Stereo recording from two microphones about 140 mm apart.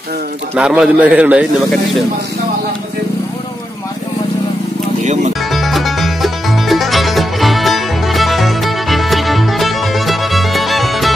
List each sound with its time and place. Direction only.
0.6 s a man's voice: 5° right (ahead or behind)
5.0 s music: 55° right (ahead or behind)
5.5 s music: centre (ahead or behind)